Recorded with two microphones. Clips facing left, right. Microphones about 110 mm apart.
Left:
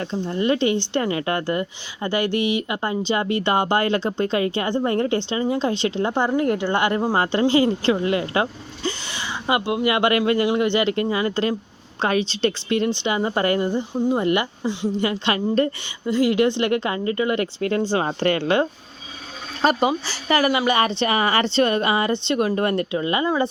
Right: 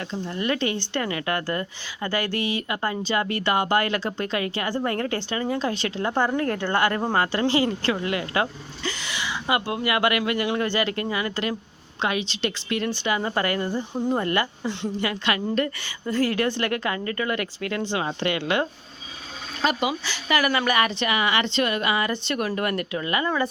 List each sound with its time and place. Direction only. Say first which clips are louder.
0.0 s speech: left 5 dB; 30° left (ahead or behind)
16.0 s speech: left 5 dB; 15° left (ahead or behind); by 18.6 s 35° left (ahead or behind)
19.6 s a woman's voice: left 5 dB; 35° left (ahead or behind)
20.5 s speech: left 3 dB; 20° left (ahead or behind)
20.7 s speech: left 3 dB; 30° left (ahead or behind)